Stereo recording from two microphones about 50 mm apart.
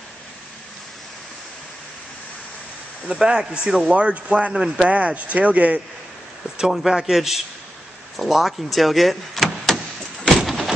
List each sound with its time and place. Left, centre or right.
3.2 s a man's voice: centre
3.9 s speech: right
4.5 s a man's voice: centre
4.8 s speech: right
6.6 s a man's voice: centre
10.4 s a sound: centre